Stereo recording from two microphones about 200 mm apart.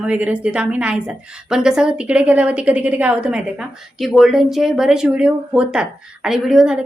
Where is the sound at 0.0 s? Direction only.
5° right (ahead or behind).